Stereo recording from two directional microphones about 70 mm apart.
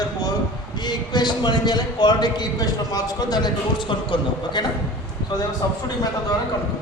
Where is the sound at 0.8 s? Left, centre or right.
Left.